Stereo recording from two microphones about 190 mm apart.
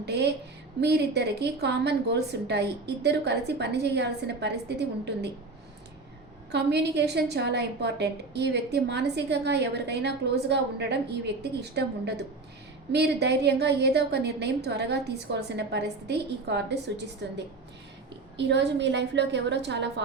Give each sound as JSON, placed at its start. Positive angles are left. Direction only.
{"t": 0.0, "sound": "a woman's voice", "side_deg": -60}
{"t": 6.5, "sound": "a woman's voice", "side_deg": -60}